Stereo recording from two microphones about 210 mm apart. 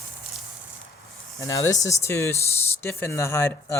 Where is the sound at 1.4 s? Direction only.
15° left (ahead or behind).